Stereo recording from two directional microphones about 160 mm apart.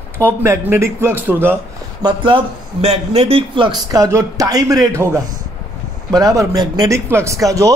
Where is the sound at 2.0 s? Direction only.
30° right (ahead or behind).